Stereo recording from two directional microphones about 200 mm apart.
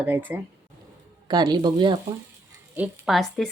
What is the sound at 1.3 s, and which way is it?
Speech, 20° right (ahead or behind).